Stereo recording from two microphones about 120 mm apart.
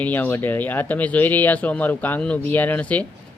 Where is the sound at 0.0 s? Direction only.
15° left (ahead or behind).